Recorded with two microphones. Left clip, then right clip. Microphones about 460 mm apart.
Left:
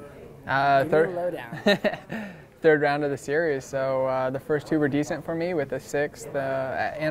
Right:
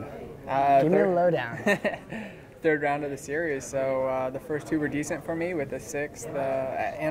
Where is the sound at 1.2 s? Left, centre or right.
Right.